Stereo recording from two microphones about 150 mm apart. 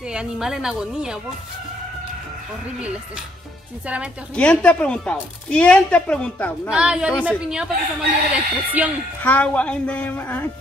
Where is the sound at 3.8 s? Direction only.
10° right (ahead or behind).